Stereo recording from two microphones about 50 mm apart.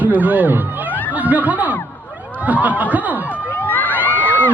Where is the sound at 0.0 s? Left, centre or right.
Right.